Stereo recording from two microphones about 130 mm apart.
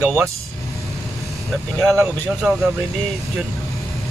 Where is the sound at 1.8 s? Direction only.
Centre (ahead or behind).